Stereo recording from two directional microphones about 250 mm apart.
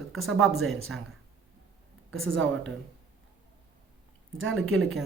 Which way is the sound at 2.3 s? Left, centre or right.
Centre.